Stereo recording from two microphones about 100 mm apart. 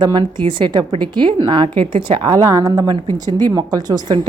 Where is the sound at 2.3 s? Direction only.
35° right (ahead or behind).